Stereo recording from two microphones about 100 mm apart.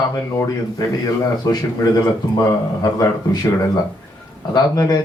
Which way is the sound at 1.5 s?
40° left (ahead or behind).